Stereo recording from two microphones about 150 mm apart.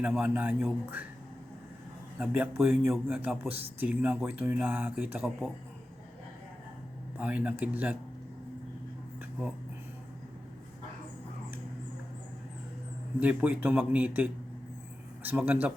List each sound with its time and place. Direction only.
0.2 s speech: 10° right (ahead or behind)
2.1 s speech: 10° right (ahead or behind)
7.2 s speech: 10° right (ahead or behind)
13.1 s speech: 10° right (ahead or behind)